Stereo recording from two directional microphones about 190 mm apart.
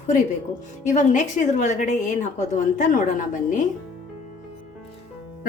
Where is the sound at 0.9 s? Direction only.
40° left (ahead or behind).